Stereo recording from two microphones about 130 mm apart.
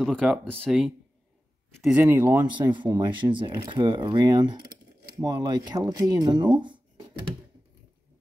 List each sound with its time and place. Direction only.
0.0 s speech: centre (ahead or behind)
2.0 s speech: 20° right (ahead or behind)
2.5 s speech: 35° right (ahead or behind)